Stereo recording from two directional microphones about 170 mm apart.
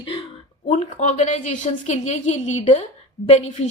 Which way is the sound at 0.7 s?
40° left (ahead or behind).